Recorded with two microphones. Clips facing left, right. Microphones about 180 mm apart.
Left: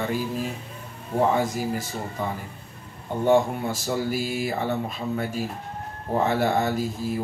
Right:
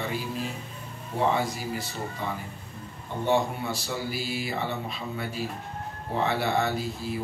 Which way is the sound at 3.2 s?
45° left (ahead or behind).